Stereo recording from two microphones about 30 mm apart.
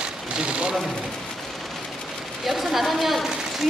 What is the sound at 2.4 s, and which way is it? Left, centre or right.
Speech, centre.